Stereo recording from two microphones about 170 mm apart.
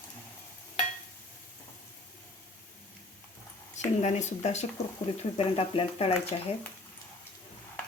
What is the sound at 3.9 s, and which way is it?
A woman's voice, 40° left (ahead or behind).